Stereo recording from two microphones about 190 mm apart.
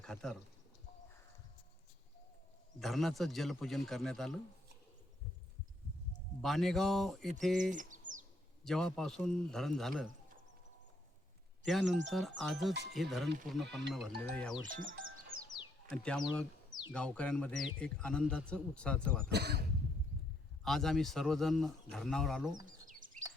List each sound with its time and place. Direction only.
0.0 s speech: 5° left (ahead or behind)
2.7 s speech: centre (ahead or behind)
6.4 s speech: centre (ahead or behind)
7.7 s bird: 40° right (ahead or behind)
8.6 s speech: 5° left (ahead or behind)
11.6 s speech: centre (ahead or behind)
14.7 s speech: 45° right (ahead or behind)
16.0 s speech: 5° left (ahead or behind)
19.3 s speech: 60° right (ahead or behind)
20.7 s speech: centre (ahead or behind)
22.6 s bird: 45° right (ahead or behind)